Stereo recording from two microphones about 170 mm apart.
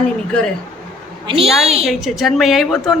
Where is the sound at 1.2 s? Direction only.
30° right (ahead or behind).